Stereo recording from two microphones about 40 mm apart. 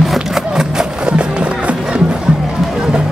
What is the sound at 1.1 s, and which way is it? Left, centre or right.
Music, right.